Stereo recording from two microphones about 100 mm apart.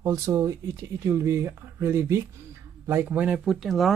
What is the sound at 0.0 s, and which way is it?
Speech, 35° right (ahead or behind).